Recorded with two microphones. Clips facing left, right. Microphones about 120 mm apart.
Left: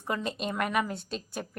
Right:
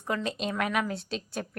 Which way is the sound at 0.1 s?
5° left (ahead or behind).